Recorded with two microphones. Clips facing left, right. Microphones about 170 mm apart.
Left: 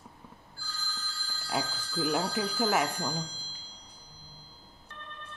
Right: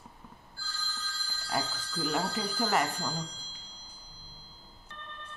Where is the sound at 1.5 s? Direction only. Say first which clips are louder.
Left 1 dB; 5° left (ahead or behind).